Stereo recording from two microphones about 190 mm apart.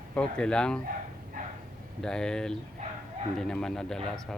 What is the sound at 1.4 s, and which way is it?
Dog, 45° right (ahead or behind).